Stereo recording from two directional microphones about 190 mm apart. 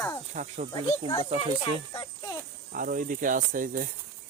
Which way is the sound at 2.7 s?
45° right (ahead or behind).